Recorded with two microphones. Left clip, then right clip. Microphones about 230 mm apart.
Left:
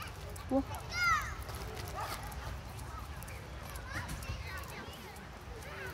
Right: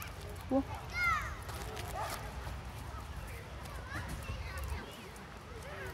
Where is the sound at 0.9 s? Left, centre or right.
Left.